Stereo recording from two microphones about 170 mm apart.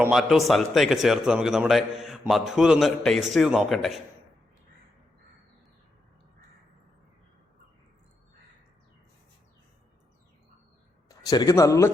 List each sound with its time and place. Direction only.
0.0 s a man's voice: centre (ahead or behind)
11.2 s speech: 20° left (ahead or behind)